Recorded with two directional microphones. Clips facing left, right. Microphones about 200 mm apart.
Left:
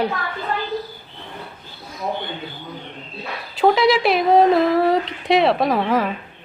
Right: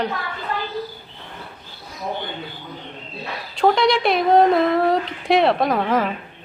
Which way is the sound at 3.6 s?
5° left (ahead or behind).